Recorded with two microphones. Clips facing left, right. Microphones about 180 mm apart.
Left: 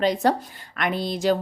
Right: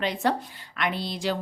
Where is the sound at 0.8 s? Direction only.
45° left (ahead or behind).